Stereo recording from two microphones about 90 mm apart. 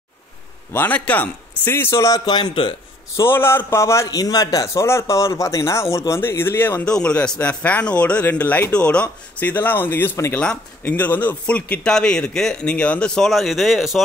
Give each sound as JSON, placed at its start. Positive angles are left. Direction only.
{"t": 0.7, "sound": "a man's voice", "side_deg": 20}
{"t": 3.2, "sound": "speech", "side_deg": 25}
{"t": 4.2, "sound": "a man's voice", "side_deg": 45}
{"t": 4.8, "sound": "speech", "side_deg": 30}
{"t": 6.9, "sound": "speech", "side_deg": 10}
{"t": 10.3, "sound": "speech", "side_deg": 10}